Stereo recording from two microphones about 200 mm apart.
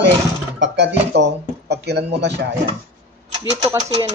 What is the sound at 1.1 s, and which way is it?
Speech, 60° right (ahead or behind).